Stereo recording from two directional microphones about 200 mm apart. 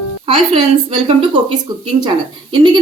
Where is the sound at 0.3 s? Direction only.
25° right (ahead or behind).